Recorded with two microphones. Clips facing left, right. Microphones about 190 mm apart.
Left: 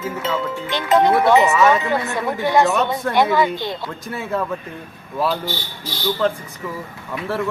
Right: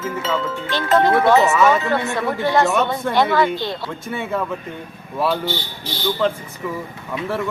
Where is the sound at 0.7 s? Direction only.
20° left (ahead or behind).